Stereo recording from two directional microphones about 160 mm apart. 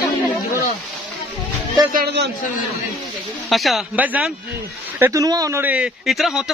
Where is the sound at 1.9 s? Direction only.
90° right.